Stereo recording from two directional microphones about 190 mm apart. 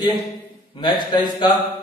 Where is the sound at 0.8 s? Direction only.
20° left (ahead or behind).